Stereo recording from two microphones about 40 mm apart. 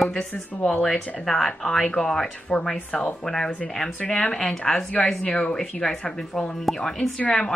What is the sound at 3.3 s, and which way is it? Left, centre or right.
Speech, centre.